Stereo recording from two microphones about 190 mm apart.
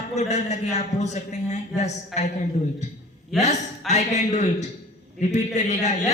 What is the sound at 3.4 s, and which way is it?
Speech, 35° left (ahead or behind).